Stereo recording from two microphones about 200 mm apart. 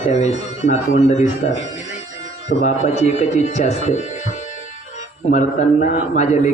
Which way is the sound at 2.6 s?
35° left (ahead or behind).